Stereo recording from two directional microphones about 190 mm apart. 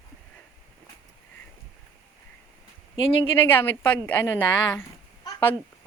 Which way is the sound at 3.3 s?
10° left (ahead or behind).